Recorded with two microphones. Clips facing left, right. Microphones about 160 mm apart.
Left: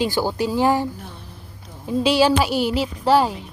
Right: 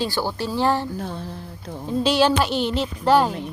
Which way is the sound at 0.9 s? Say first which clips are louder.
Right 9 dB; 90° right.